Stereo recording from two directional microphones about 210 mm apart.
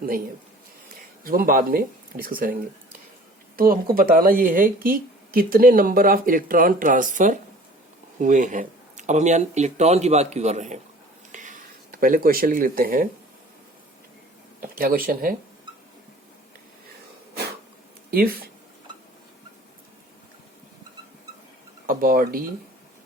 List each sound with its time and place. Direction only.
0.9 s speech: 40° right (ahead or behind)
3.6 s speech: 45° right (ahead or behind)
11.3 s a sound: 35° right (ahead or behind)
14.6 s speech: 45° right (ahead or behind)
18.1 s speech: 45° right (ahead or behind)
21.8 s speech: 45° right (ahead or behind)